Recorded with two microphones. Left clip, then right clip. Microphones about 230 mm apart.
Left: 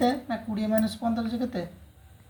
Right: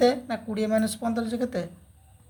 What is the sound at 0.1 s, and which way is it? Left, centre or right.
A woman's voice, right.